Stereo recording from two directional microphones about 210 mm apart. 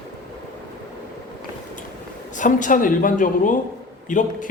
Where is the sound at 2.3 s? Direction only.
35° left (ahead or behind).